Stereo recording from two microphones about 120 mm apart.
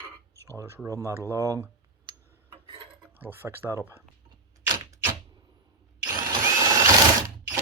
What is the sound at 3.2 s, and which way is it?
Speech, 15° right (ahead or behind).